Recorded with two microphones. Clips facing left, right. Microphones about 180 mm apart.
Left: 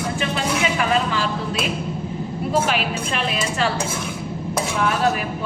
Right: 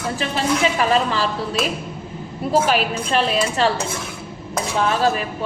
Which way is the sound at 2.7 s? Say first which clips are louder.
Right 4 dB; 35° right (ahead or behind).